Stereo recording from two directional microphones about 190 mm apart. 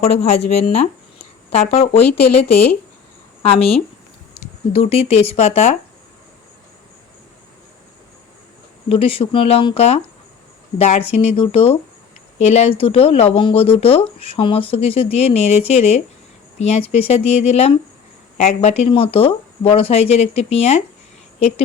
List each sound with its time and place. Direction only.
0.0 s speech: 35° left (ahead or behind)
3.4 s speech: 30° left (ahead or behind)
8.9 s speech: 30° left (ahead or behind)